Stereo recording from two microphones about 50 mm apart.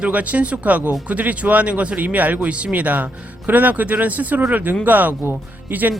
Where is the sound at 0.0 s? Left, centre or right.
Right.